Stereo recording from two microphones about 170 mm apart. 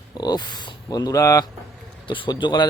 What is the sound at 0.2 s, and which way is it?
Speech, 25° left (ahead or behind).